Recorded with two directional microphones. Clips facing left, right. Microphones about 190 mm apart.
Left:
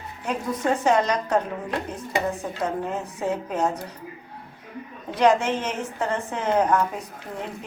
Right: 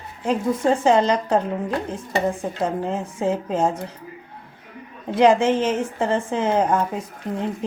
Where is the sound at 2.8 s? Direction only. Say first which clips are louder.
Right 4 dB; 25° right (ahead or behind).